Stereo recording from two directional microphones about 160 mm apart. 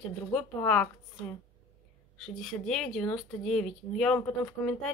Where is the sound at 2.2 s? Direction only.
Centre (ahead or behind).